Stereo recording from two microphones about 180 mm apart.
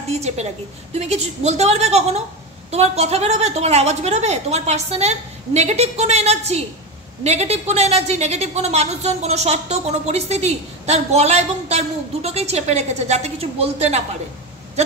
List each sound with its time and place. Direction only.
0.1 s a woman's voice: 35° right (ahead or behind)